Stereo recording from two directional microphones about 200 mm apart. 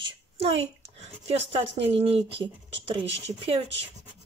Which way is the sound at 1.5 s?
30° right (ahead or behind).